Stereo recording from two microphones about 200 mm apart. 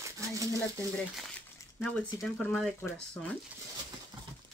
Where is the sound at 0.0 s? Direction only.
15° right (ahead or behind).